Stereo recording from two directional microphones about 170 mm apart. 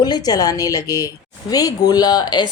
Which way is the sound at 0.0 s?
25° left (ahead or behind).